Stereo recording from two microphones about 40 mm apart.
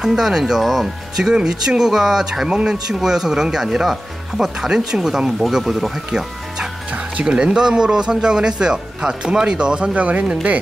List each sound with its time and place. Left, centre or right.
0.0 s speech: centre
1.1 s speech: centre
2.4 s speech: right; by 5.9 s centre
6.9 s music: right
7.3 s speech: right